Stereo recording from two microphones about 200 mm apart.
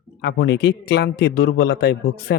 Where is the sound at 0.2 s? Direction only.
60° left (ahead or behind).